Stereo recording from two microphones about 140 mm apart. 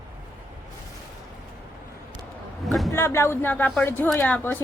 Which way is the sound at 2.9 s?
20° left (ahead or behind).